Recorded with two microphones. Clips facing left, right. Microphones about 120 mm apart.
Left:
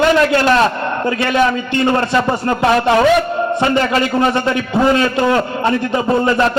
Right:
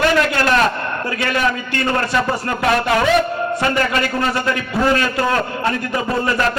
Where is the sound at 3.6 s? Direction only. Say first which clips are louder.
Left 4 dB; 25° left (ahead or behind).